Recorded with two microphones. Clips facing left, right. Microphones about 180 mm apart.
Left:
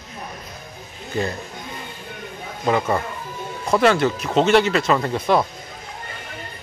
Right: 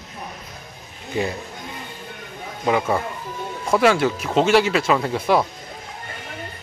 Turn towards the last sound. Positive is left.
turn(degrees=-5)  # may be behind; listen again after turning